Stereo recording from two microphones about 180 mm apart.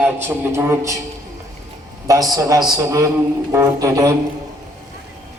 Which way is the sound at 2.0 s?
20° right (ahead or behind).